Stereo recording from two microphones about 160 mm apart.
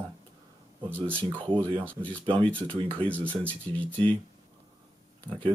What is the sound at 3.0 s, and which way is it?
Speech, 10° left (ahead or behind).